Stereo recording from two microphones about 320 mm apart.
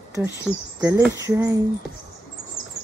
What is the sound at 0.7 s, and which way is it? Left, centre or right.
Speech, centre.